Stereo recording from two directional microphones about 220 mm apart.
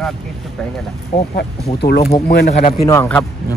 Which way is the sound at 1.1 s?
40° left (ahead or behind).